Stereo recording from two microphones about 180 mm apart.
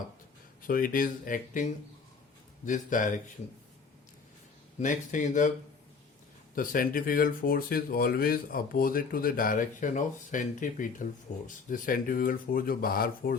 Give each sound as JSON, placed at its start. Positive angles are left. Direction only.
{"t": 0.6, "sound": "speech", "side_deg": 50}
{"t": 2.6, "sound": "speech", "side_deg": 45}
{"t": 4.8, "sound": "speech", "side_deg": 45}
{"t": 6.6, "sound": "speech", "side_deg": 50}